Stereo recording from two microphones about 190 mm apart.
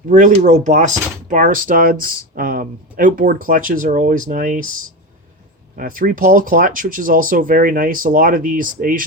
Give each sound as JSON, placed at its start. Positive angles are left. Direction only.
{"t": 0.1, "sound": "speech", "side_deg": -40}
{"t": 5.7, "sound": "speech", "side_deg": -45}